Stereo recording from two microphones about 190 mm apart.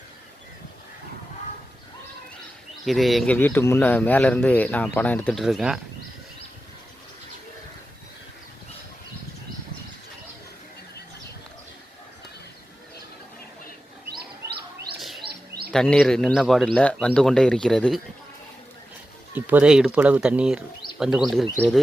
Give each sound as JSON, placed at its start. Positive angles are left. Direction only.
{"t": 2.8, "sound": "speech", "side_deg": 0}
{"t": 15.2, "sound": "bird", "side_deg": -55}
{"t": 15.7, "sound": "speech", "side_deg": 5}
{"t": 19.5, "sound": "speech", "side_deg": -5}